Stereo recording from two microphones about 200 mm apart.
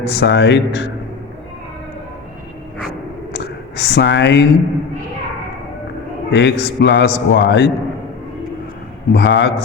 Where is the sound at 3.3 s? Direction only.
55° left (ahead or behind).